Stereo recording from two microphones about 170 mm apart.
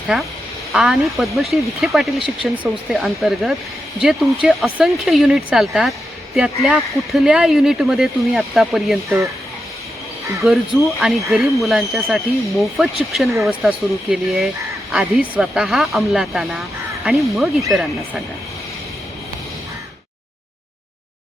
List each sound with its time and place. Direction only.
0.1 s speech: 5° right (ahead or behind)
9.0 s speech: 15° right (ahead or behind)
10.4 s speech: 5° right (ahead or behind)